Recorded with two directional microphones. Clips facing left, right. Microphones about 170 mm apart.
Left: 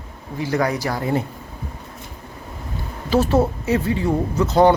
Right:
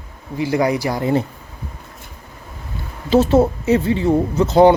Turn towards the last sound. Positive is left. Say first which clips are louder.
# right 4 dB
turn(degrees=-25)  # may be behind; listen again after turning